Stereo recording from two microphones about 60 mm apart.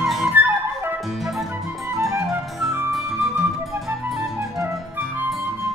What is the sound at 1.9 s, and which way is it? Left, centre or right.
Music, right.